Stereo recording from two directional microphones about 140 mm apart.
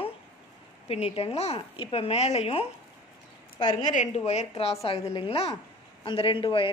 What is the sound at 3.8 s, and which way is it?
A woman's voice, 55° left (ahead or behind).